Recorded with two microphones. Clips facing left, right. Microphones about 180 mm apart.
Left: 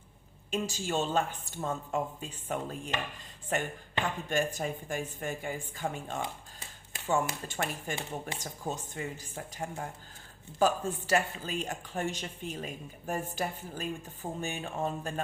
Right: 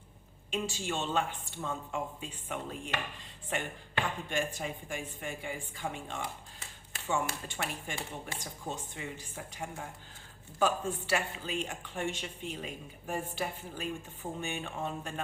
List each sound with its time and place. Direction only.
0.5 s speech: 40° left (ahead or behind)
7.4 s speech: 45° left (ahead or behind)